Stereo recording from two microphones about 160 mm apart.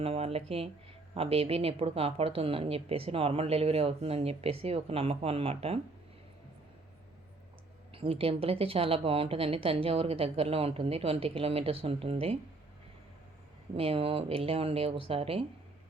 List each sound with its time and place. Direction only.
0.0 s speech: 40° right (ahead or behind)
7.9 s speech: 35° right (ahead or behind)
13.7 s speech: 35° right (ahead or behind)